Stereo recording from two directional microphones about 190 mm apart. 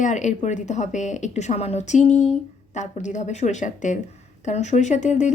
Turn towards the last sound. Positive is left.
turn(degrees=40)  # may be behind; listen again after turning